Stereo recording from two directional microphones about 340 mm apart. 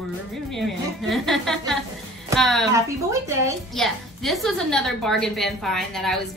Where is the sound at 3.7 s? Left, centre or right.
Centre.